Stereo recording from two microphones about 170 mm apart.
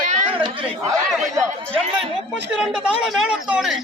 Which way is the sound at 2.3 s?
5° right (ahead or behind).